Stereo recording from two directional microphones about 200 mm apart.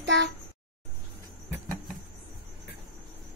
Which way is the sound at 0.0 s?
60° right (ahead or behind).